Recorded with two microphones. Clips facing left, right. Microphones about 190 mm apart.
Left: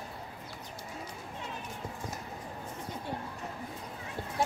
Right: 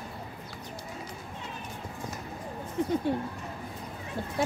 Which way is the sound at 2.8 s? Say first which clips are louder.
Right 17 dB; 75° right (ahead or behind).